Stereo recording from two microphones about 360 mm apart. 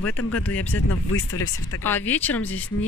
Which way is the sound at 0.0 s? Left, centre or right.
Left.